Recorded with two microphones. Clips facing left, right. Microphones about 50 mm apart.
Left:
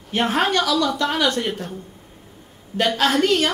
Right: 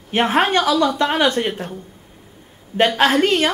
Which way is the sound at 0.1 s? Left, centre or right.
Right.